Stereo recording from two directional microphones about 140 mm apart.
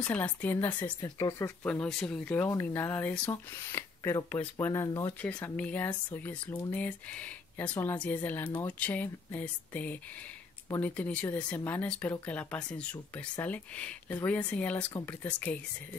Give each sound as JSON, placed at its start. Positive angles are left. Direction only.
{"t": 0.0, "sound": "speech", "side_deg": 10}
{"t": 1.0, "sound": "speech", "side_deg": 30}
{"t": 1.6, "sound": "speech", "side_deg": 10}
{"t": 5.2, "sound": "speech", "side_deg": 10}